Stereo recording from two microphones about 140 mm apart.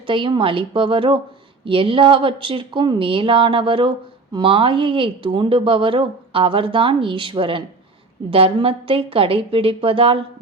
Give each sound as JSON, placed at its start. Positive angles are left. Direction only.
{"t": 0.1, "sound": "speech", "side_deg": -35}